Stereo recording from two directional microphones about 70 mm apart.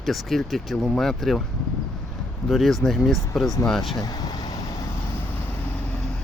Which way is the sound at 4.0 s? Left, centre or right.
Left.